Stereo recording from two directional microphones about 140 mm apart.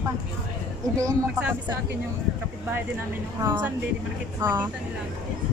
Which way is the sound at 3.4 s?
20° right (ahead or behind).